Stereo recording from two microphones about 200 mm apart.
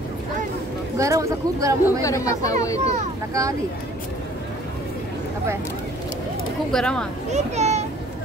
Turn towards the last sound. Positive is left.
turn(degrees=-35)  # may be behind; listen again after turning